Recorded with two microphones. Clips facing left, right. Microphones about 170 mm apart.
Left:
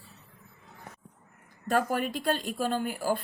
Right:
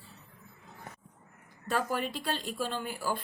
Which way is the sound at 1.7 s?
50° left (ahead or behind).